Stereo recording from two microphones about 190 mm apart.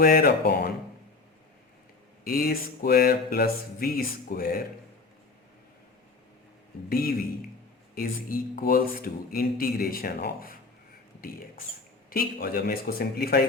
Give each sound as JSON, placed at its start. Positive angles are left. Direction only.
{"t": 0.0, "sound": "speech", "side_deg": 55}
{"t": 2.2, "sound": "speech", "side_deg": 50}
{"t": 6.9, "sound": "speech", "side_deg": 50}
{"t": 12.1, "sound": "speech", "side_deg": 50}